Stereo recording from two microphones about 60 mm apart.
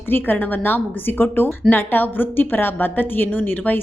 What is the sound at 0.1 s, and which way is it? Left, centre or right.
A woman's voice, left.